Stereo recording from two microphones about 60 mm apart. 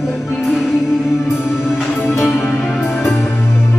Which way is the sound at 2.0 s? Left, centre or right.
Centre.